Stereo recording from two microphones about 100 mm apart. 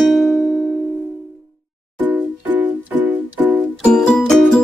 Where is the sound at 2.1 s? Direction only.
20° right (ahead or behind).